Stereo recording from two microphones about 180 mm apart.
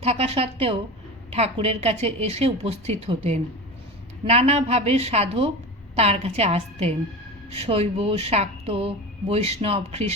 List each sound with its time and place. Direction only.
0.0 s speech: 35° right (ahead or behind)
4.3 s speech: 35° right (ahead or behind)